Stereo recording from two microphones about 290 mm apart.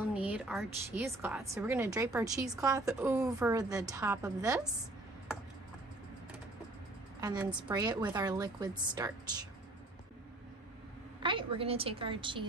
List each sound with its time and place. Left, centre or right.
0.1 s a woman's voice: centre
7.2 s a woman's voice: centre
11.2 s a woman's voice: centre